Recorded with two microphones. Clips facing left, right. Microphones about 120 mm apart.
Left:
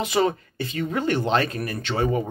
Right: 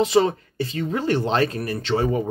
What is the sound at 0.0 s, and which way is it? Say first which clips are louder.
Speech: right 4 dB; 30° right (ahead or behind).